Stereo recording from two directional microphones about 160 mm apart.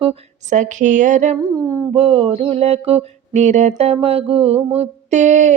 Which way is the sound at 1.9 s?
35° right (ahead or behind).